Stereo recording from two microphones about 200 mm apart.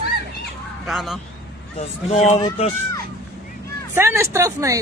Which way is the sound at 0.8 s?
Centre (ahead or behind).